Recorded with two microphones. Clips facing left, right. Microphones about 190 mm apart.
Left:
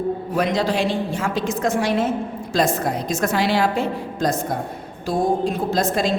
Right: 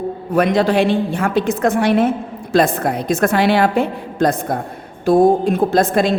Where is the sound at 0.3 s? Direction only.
60° right (ahead or behind).